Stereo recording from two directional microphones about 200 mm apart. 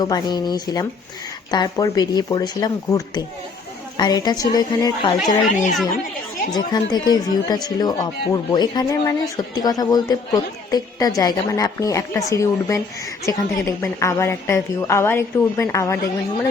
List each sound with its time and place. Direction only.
0.0 s speech: 20° left (ahead or behind)
6.5 s a woman's voice: 20° left (ahead or behind)